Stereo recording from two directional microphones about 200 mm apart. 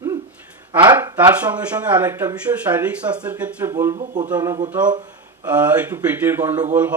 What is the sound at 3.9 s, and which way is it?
Speech, 40° right (ahead or behind).